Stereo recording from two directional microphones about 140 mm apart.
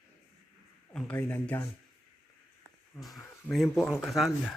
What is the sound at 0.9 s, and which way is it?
Speech, 5° left (ahead or behind).